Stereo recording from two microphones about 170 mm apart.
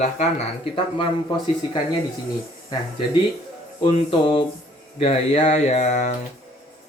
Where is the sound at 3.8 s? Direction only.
35° left (ahead or behind).